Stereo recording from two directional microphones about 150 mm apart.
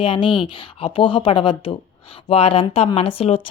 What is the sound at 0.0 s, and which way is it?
A woman's voice, 35° left (ahead or behind).